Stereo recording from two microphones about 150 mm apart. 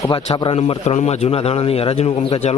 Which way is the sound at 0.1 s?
35° left (ahead or behind).